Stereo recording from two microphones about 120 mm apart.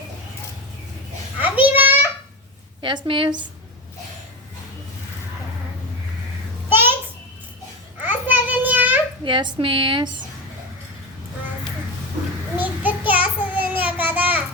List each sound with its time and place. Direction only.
1.4 s a sound: 15° right (ahead or behind)
2.8 s a woman's voice: 40° right (ahead or behind)
6.7 s a sound: 20° right (ahead or behind)
8.0 s child singing: 15° right (ahead or behind)
9.2 s a woman's voice: 40° right (ahead or behind)
12.5 s child singing: 15° right (ahead or behind)